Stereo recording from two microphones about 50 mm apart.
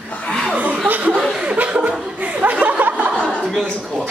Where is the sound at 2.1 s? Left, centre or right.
Right.